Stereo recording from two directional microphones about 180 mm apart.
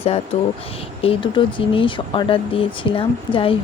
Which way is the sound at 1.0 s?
30° left (ahead or behind).